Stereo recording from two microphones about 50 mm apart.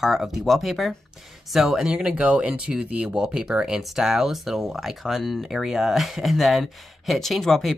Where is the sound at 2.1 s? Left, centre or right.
Right.